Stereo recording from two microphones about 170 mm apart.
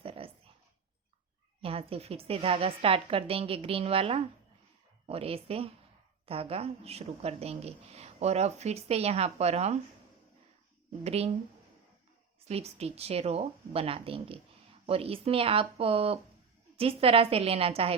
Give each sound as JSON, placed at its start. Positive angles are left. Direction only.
{"t": 0.0, "sound": "dog", "side_deg": -35}
{"t": 1.6, "sound": "speech", "side_deg": -35}
{"t": 11.0, "sound": "speech", "side_deg": -35}
{"t": 12.5, "sound": "speech", "side_deg": -40}